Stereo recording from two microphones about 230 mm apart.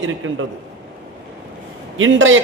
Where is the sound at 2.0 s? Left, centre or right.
Right.